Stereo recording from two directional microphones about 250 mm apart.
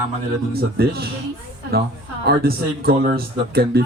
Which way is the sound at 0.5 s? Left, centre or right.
Right.